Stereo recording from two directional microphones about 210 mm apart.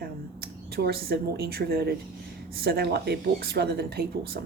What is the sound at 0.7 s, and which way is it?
Speech, 50° right (ahead or behind).